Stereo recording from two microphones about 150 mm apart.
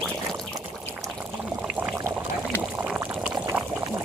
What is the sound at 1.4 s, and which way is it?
Pour, 5° right (ahead or behind).